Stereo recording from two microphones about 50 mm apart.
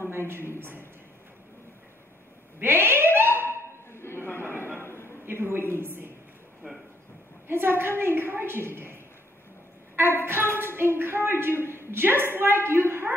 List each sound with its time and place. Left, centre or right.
0.3 s a woman's voice: right
2.6 s cat: right
3.5 s a sound: left
5.2 s a sound: right
5.7 s a woman's voice: right
7.4 s a woman's voice: right